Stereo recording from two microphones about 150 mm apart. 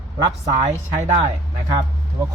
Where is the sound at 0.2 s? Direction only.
25° right (ahead or behind).